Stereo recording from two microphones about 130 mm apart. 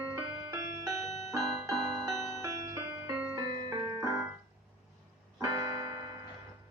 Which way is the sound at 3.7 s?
30° right (ahead or behind).